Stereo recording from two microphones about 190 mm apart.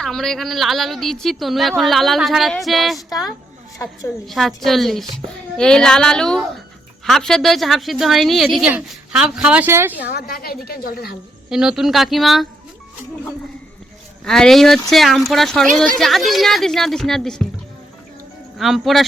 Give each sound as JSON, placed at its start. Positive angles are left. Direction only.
{"t": 0.0, "sound": "a woman's voice", "side_deg": 0}
{"t": 4.3, "sound": "a woman's voice", "side_deg": 0}
{"t": 10.1, "sound": "a woman's voice", "side_deg": 55}
{"t": 11.4, "sound": "a woman's voice", "side_deg": -5}
{"t": 14.3, "sound": "a woman's voice", "side_deg": 5}
{"t": 18.5, "sound": "a woman's voice", "side_deg": 0}